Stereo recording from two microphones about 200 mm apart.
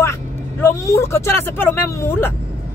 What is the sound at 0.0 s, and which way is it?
Speech, 15° left (ahead or behind).